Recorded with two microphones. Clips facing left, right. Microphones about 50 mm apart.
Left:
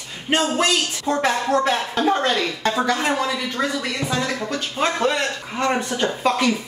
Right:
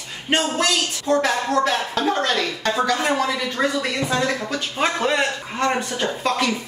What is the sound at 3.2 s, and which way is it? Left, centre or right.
Speech, centre.